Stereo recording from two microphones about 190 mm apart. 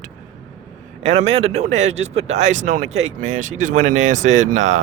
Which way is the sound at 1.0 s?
30° right (ahead or behind).